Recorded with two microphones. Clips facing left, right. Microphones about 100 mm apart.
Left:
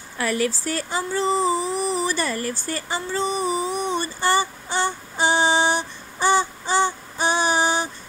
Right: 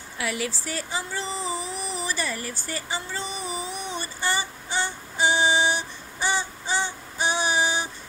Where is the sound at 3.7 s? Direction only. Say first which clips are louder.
Left 8 dB; 50° left (ahead or behind).